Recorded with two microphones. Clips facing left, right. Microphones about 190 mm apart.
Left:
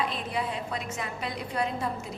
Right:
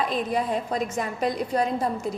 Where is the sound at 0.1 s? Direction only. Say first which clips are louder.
Right 7 dB; 45° right (ahead or behind).